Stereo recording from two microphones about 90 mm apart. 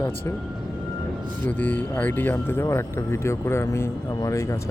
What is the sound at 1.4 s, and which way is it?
Speech, 20° left (ahead or behind).